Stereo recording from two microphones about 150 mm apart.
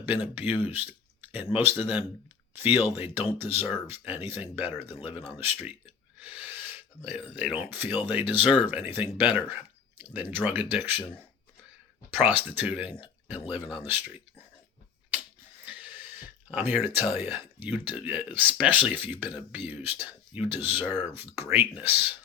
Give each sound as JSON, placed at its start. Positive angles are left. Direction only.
{"t": 0.6, "sound": "speech", "side_deg": -15}
{"t": 5.0, "sound": "gasp", "side_deg": -10}
{"t": 7.3, "sound": "speech", "side_deg": -10}
{"t": 12.1, "sound": "speech", "side_deg": -10}
{"t": 15.6, "sound": "speech", "side_deg": -10}